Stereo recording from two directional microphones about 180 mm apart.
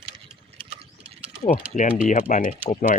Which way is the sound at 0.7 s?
35° right (ahead or behind).